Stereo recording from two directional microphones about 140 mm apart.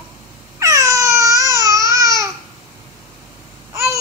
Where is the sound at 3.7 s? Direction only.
20° right (ahead or behind).